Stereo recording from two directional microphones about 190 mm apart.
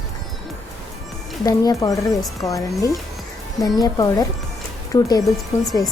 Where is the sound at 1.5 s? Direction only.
20° left (ahead or behind).